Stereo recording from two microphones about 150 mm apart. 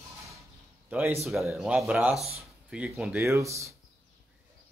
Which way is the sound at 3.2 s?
20° right (ahead or behind).